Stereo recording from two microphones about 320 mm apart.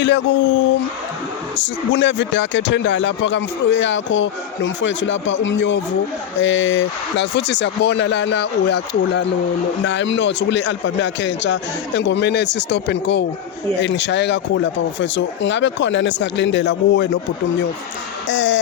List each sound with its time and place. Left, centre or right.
0.0 s speech: left
1.5 s speech: left
18.3 s speech: left